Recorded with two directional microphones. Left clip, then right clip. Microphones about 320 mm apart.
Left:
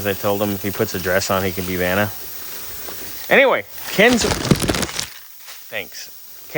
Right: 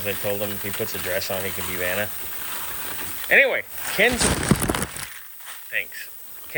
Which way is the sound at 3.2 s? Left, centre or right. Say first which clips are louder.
Left 4 dB; left.